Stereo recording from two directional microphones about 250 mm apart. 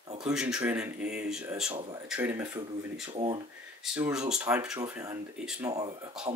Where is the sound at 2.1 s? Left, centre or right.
Centre.